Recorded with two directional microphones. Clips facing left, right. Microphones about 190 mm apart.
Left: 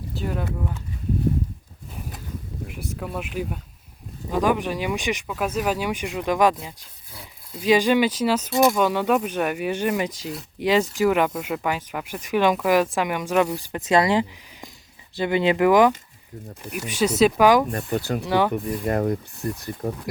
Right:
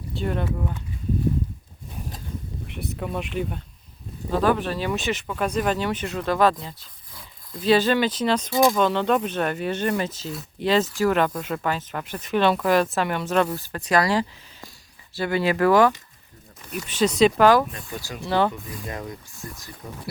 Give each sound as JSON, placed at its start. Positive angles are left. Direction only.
{"t": 0.1, "sound": "speech", "side_deg": 5}
{"t": 3.0, "sound": "speech", "side_deg": 5}
{"t": 17.7, "sound": "speech", "side_deg": 60}
{"t": 18.3, "sound": "speech", "side_deg": 15}
{"t": 18.5, "sound": "speech", "side_deg": 55}